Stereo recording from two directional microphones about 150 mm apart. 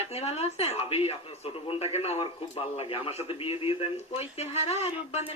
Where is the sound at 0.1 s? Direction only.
45° left (ahead or behind).